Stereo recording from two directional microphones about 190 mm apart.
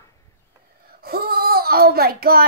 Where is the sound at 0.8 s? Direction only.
50° right (ahead or behind).